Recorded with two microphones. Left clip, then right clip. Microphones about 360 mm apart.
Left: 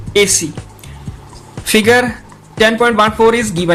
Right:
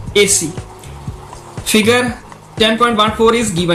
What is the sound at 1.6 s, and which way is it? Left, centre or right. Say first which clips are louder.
Speech: left 2 dB; left.